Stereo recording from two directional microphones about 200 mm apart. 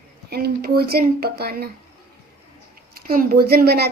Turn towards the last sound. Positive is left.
turn(degrees=-50)  # may be behind; listen again after turning